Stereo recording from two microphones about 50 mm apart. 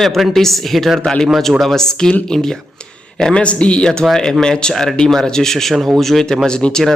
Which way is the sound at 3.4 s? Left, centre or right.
Left.